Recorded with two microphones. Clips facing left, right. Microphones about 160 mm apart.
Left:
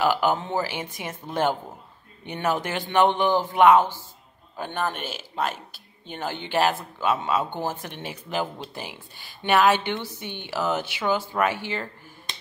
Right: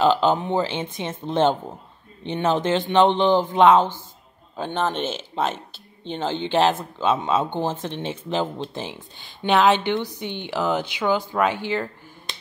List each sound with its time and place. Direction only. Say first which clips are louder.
0.0 s speech: right 4 dB; 20° right (ahead or behind)